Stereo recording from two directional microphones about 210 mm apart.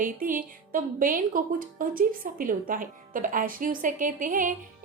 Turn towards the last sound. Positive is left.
turn(degrees=-40)  # may be behind; listen again after turning